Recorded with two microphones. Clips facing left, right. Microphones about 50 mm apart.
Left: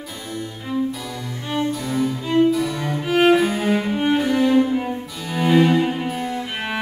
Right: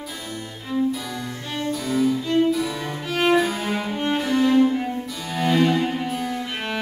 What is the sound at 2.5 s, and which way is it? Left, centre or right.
Music, centre.